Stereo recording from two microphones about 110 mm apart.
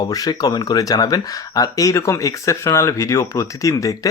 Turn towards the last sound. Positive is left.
turn(degrees=30)  # may be behind; listen again after turning